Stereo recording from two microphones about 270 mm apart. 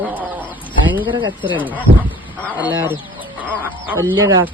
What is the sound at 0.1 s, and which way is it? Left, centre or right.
Bird, centre.